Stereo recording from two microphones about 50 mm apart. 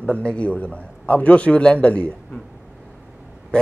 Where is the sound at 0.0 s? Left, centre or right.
Left.